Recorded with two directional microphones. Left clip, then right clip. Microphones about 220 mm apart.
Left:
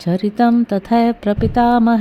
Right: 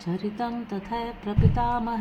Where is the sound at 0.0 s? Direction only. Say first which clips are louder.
Left 14 dB; 45° left (ahead or behind).